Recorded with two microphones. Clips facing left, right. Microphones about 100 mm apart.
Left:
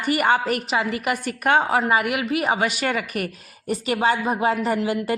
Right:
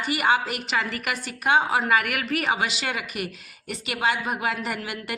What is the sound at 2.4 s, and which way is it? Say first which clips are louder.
A woman's voice: left 4 dB; 45° left (ahead or behind).